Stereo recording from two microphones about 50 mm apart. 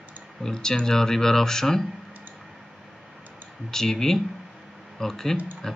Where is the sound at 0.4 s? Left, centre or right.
Centre.